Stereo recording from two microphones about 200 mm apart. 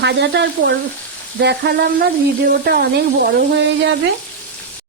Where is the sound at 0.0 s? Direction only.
60° right (ahead or behind).